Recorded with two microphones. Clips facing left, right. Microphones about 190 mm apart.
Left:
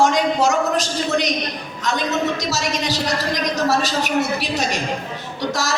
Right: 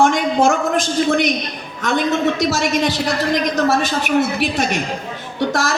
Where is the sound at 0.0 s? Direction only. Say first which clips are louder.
Right 2 dB; 55° right (ahead or behind).